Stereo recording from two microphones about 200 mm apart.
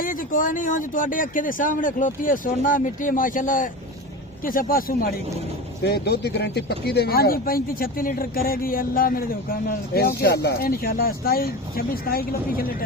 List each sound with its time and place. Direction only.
0.0 s speech: 45° left (ahead or behind)